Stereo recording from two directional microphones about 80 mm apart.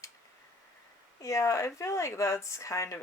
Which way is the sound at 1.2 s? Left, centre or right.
Left.